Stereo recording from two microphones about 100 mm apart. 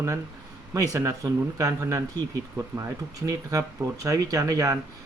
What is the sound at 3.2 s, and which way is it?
Speech, 35° right (ahead or behind).